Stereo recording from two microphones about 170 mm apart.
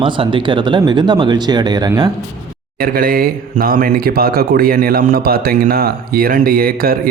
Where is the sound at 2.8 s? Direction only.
60° right (ahead or behind).